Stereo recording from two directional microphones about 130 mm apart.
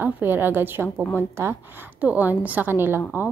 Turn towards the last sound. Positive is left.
turn(degrees=-15)  # may be behind; listen again after turning